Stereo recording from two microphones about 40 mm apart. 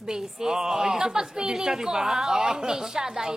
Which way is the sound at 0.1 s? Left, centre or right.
Centre.